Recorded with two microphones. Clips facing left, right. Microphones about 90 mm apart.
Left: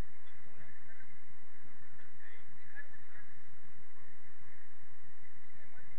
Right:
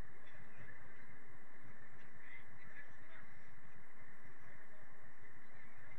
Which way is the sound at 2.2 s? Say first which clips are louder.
Even; 55° left (ahead or behind).